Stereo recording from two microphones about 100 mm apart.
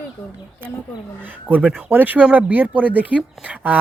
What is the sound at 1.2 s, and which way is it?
Speech, 15° right (ahead or behind).